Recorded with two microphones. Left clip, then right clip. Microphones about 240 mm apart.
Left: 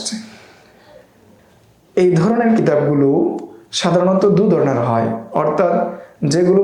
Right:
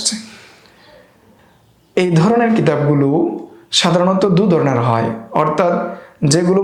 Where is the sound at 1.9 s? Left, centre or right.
Right.